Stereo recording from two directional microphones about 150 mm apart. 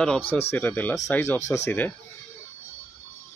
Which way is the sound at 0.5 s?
10° left (ahead or behind).